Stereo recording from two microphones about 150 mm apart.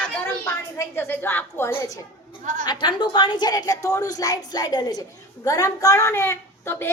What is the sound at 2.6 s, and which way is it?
A woman's voice, 30° left (ahead or behind).